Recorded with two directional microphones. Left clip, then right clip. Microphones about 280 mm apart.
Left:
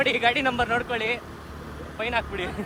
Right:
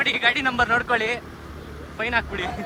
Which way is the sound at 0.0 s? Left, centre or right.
Centre.